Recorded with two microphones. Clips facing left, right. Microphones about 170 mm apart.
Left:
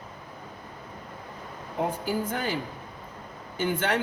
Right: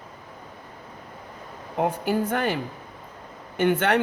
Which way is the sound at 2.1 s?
65° right (ahead or behind).